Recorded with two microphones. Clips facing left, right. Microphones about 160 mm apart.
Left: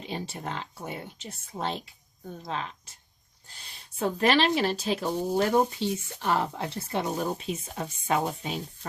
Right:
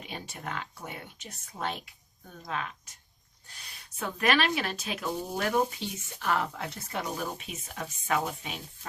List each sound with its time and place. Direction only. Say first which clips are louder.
0.0 s speech: left 5 dB; 30° left (ahead or behind)